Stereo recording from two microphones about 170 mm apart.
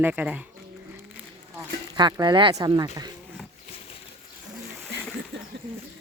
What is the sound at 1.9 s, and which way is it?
Speech, 25° right (ahead or behind).